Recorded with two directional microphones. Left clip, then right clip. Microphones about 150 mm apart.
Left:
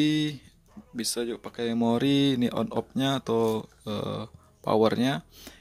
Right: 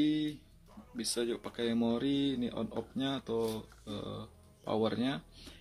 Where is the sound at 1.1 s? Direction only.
35° left (ahead or behind).